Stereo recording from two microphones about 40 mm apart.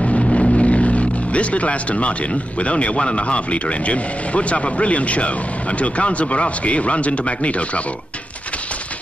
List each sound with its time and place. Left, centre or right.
0.0 s vehicle: left
2.6 s speech: left